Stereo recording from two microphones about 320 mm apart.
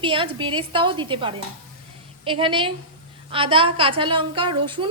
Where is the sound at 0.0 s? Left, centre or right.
Centre.